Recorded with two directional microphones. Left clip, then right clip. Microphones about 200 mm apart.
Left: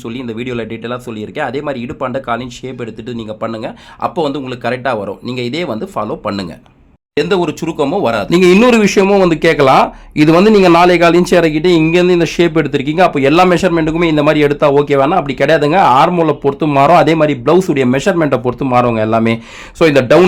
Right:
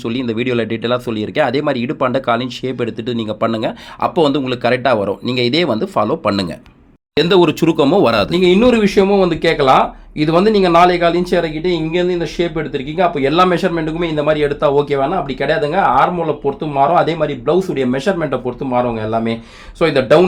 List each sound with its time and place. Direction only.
0.0 s speech: 10° right (ahead or behind)
8.3 s speech: 40° left (ahead or behind)
14.8 s speech: 35° left (ahead or behind)